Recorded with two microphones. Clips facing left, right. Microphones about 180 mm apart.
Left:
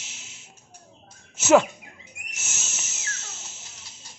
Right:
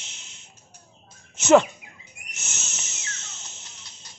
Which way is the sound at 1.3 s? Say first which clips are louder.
Right 1 dB; 5° left (ahead or behind).